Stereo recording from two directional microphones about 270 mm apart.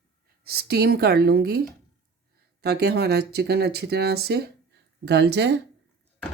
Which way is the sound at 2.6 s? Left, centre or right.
Right.